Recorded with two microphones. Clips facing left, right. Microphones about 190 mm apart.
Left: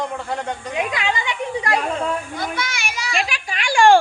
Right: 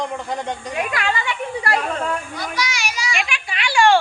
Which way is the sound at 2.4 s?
55° left (ahead or behind).